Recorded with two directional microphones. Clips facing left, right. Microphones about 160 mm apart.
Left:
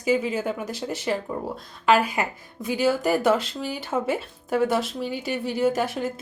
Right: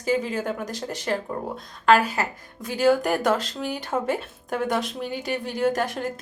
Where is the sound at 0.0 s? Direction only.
5° left (ahead or behind).